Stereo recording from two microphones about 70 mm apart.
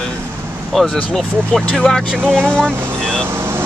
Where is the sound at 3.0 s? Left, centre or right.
Centre.